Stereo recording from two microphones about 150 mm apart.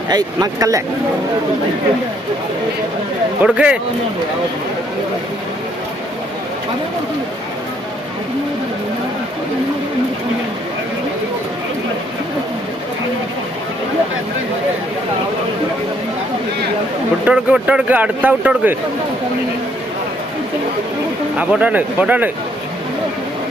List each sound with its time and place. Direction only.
0.1 s speech: 25° right (ahead or behind)
3.4 s speech: 5° right (ahead or behind)
17.2 s speech: 5° right (ahead or behind)
21.3 s speech: 10° right (ahead or behind)